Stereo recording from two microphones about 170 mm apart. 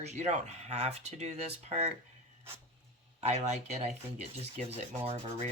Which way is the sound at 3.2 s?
40° right (ahead or behind).